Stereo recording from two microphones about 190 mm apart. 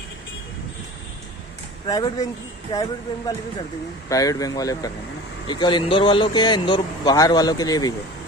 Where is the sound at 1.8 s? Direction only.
20° left (ahead or behind).